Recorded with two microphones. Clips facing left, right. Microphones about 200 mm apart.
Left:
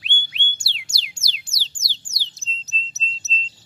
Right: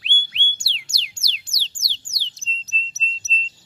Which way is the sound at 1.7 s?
5° left (ahead or behind).